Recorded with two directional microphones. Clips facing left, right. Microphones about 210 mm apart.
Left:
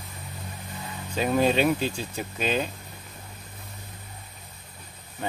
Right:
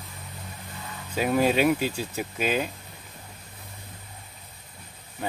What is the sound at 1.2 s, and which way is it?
Speech, 5° right (ahead or behind).